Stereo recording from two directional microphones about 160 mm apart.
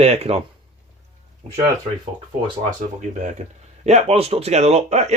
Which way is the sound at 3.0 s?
50° right (ahead or behind).